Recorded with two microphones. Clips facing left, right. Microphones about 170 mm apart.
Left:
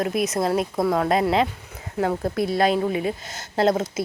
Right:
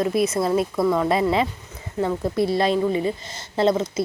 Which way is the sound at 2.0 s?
65° left (ahead or behind).